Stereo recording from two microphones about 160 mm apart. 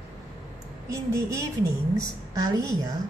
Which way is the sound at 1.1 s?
20° right (ahead or behind).